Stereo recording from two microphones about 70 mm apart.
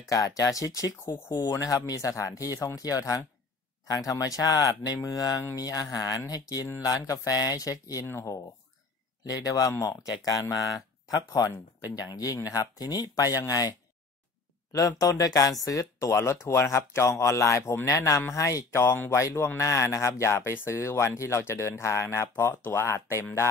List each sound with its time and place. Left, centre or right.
0.1 s speech: left
9.2 s speech: left